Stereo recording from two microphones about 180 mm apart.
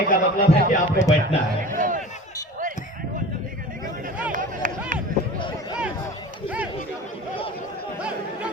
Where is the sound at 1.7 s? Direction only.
45° right (ahead or behind).